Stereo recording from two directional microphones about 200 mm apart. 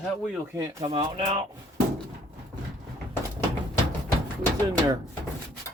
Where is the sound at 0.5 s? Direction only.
15° right (ahead or behind).